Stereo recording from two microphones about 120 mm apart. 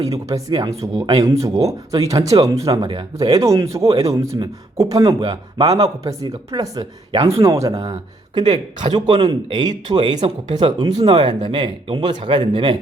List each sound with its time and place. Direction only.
0.3 s speech: 30° right (ahead or behind)
7.4 s speech: 25° right (ahead or behind)
8.4 s speech: 40° right (ahead or behind)